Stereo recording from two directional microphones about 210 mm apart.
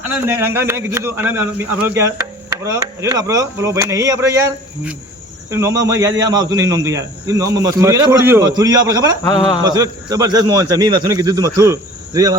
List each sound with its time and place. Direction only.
0.1 s a man's voice: 10° right (ahead or behind)